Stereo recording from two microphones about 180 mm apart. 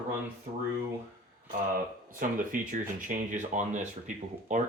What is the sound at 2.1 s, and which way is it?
Speech, 50° right (ahead or behind).